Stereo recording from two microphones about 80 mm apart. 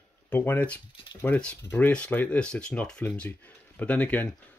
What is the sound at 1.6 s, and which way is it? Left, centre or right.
Speech, left.